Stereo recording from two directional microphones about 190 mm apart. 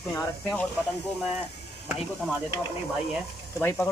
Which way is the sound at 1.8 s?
Centre (ahead or behind).